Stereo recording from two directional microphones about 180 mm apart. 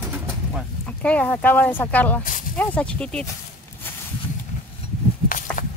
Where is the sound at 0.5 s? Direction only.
5° left (ahead or behind).